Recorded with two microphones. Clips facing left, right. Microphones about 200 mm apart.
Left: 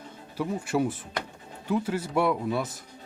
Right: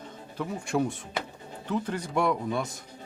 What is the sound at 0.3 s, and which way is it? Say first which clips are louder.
Speech: left 2 dB; 5° left (ahead or behind).